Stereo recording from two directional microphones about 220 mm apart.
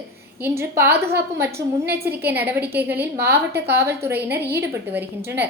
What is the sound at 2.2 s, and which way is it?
A woman's voice, 10° right (ahead or behind).